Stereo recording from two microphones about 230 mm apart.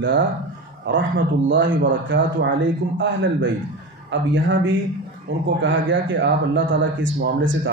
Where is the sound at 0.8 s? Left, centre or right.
Right.